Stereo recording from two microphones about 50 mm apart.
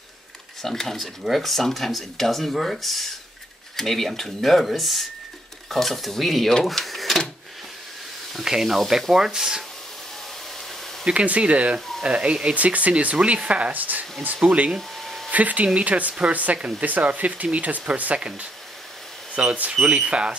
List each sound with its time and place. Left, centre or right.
0.6 s speech: centre
6.6 s cash register: centre
8.3 s speech: centre
11.1 s speech: right
12.5 s speech: right
14.8 s hair dryer: centre
15.3 s speech: right
16.5 s speech: centre
16.8 s speech: right